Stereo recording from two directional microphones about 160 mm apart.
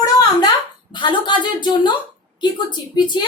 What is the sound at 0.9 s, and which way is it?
A woman's voice, 30° left (ahead or behind).